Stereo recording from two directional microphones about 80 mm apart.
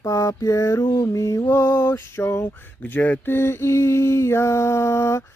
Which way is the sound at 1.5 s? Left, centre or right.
Left.